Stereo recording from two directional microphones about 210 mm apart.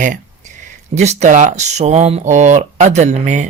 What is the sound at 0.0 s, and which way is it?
Speech, 40° right (ahead or behind).